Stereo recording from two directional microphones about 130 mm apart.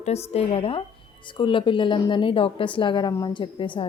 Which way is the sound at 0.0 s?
55° left (ahead or behind).